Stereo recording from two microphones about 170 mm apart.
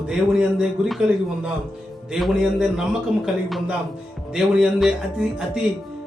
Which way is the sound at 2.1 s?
Centre (ahead or behind).